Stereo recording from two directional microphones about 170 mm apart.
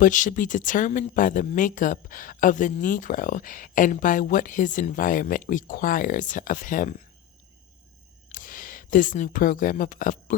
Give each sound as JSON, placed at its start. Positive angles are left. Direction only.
{"t": 0.0, "sound": "speech", "side_deg": 50}
{"t": 8.3, "sound": "speech", "side_deg": 50}